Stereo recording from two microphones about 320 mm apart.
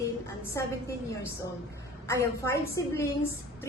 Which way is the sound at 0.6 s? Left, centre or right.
Centre.